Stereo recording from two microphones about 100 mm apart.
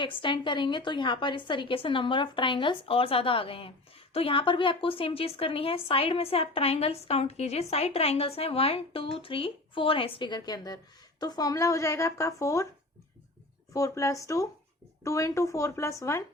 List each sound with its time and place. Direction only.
0.0 s a woman's voice: 55° left (ahead or behind); by 12.6 s 30° left (ahead or behind)
13.7 s speech: 30° left (ahead or behind)